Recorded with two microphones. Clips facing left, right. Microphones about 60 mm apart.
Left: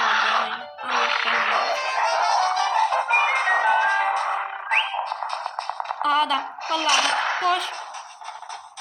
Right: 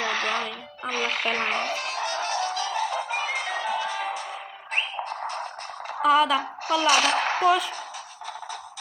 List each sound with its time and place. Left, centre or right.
0.0 s music: left
6.0 s a woman's voice: centre